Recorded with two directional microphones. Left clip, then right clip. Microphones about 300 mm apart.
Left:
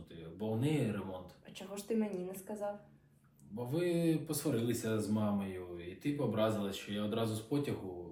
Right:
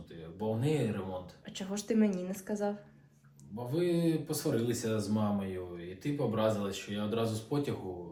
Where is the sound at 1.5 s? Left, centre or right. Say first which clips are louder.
Right 4 dB; right.